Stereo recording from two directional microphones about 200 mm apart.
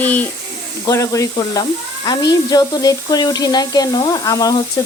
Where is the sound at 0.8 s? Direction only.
15° left (ahead or behind).